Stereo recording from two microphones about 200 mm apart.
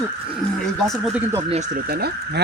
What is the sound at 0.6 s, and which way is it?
Speech, centre (ahead or behind).